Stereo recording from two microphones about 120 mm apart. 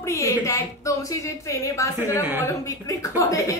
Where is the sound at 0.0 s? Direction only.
25° left (ahead or behind).